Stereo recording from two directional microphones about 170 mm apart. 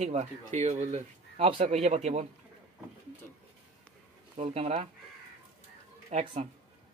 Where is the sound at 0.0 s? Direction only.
45° right (ahead or behind).